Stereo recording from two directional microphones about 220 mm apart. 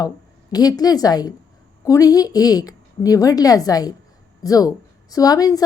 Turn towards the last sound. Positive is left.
turn(degrees=15)  # may be behind; listen again after turning